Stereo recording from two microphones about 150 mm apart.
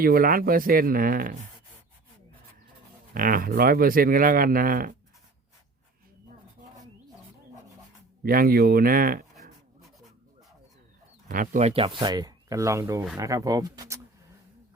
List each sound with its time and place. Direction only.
0.0 s speech: 75° right (ahead or behind)
3.2 s speech: 70° right (ahead or behind)
8.2 s speech: 75° right (ahead or behind)
11.3 s speech: 60° right (ahead or behind)
11.7 s speech: 35° right (ahead or behind)